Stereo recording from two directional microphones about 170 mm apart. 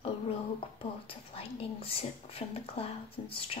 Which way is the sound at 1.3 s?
35° left (ahead or behind).